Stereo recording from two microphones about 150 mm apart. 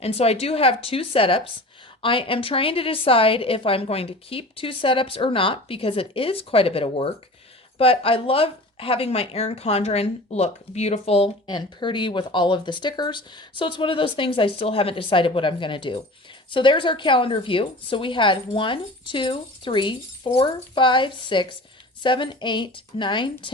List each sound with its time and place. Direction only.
0.0 s a woman's voice: 45° left (ahead or behind)
11.4 s a woman's voice: 30° left (ahead or behind)